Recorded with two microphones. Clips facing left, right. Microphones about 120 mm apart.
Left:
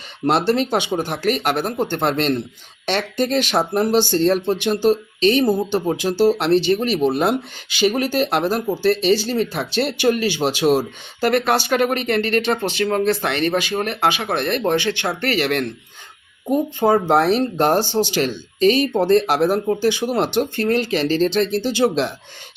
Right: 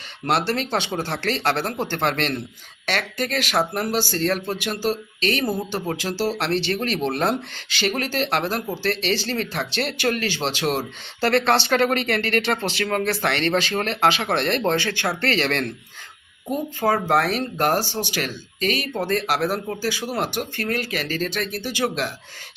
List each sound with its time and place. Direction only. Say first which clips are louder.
0.3 s speech: left 5 dB; 20° left (ahead or behind)